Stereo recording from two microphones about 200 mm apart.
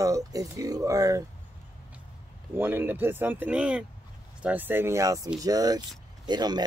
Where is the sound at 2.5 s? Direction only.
10° right (ahead or behind).